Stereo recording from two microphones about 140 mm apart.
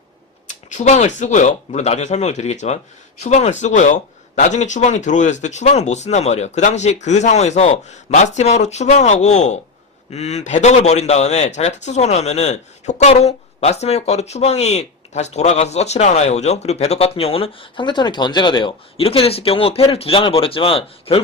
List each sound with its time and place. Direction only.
0.4 s a man's voice: 60° left (ahead or behind); by 21.2 s 40° left (ahead or behind)